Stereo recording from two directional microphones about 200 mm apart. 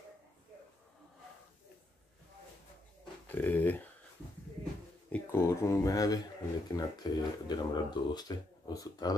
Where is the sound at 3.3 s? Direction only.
10° left (ahead or behind).